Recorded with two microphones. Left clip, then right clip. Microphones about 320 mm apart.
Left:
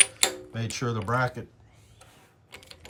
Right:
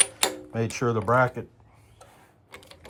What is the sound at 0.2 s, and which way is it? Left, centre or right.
Speech, centre.